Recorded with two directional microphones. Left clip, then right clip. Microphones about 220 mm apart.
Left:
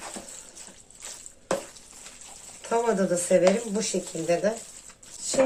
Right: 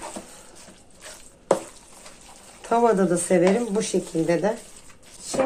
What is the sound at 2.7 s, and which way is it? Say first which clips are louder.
Speech: right 5 dB; 40° right (ahead or behind).